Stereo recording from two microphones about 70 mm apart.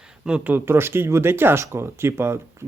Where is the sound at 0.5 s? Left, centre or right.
Right.